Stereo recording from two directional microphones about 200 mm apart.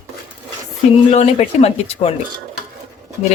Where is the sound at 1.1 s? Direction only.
30° left (ahead or behind).